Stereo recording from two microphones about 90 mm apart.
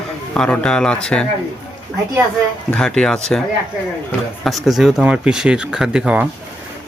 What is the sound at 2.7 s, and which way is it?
Speech, 10° left (ahead or behind).